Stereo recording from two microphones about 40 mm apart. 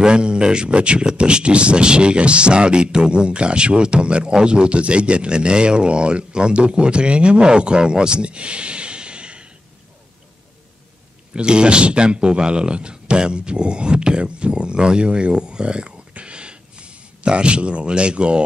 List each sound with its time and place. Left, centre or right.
0.0 s speech: right
11.3 s speech: right